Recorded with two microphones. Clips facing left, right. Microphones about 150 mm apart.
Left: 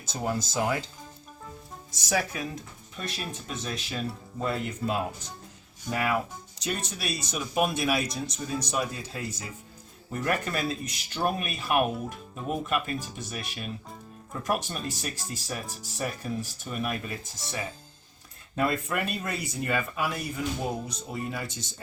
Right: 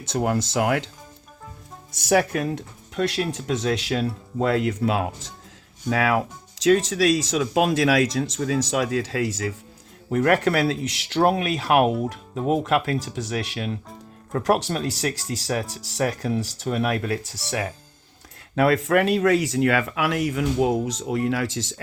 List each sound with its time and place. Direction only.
0.0 s speech: 70° right (ahead or behind)
1.9 s speech: 60° right (ahead or behind); by 9.6 s 90° right
10.1 s speech: 80° right
18.5 s speech: 90° right